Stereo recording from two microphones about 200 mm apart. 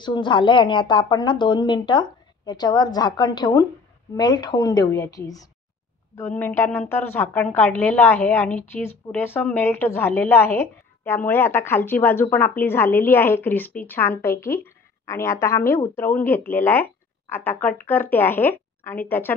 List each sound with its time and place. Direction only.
0.0 s a woman's voice: 20° left (ahead or behind)